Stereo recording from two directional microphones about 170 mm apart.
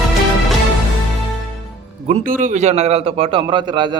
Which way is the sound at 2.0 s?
50° right (ahead or behind).